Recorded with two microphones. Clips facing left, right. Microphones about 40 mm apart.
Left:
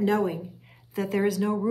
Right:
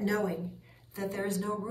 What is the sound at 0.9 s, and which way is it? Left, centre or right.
Speech, left.